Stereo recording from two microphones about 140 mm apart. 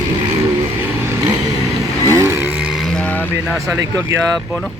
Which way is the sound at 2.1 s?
20° right (ahead or behind).